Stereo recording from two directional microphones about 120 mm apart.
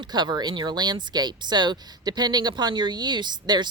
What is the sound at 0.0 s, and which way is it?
Speech, 40° right (ahead or behind).